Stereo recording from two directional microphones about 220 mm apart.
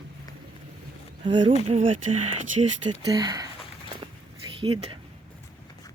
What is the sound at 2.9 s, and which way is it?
Speech, 20° right (ahead or behind).